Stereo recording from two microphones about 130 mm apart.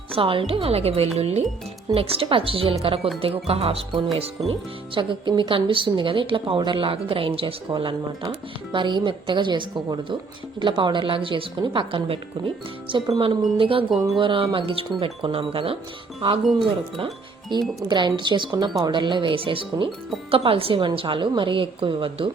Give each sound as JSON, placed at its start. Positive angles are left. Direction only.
{"t": 0.1, "sound": "a woman's voice", "side_deg": -45}
{"t": 4.9, "sound": "a woman's voice", "side_deg": -35}
{"t": 17.5, "sound": "a woman's voice", "side_deg": -35}